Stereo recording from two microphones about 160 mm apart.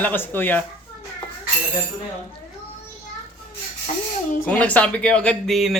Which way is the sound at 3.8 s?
50° left (ahead or behind).